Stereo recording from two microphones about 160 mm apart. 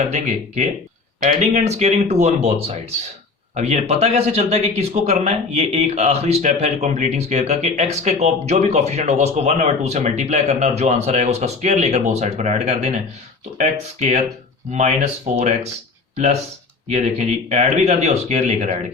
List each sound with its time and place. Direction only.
0.0 s speech: 50° right (ahead or behind)